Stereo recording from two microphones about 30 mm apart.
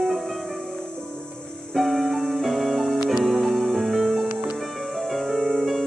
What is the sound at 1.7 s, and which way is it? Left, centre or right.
Music, centre.